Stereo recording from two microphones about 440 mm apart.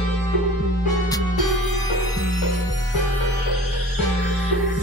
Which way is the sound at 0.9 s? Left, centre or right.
Centre.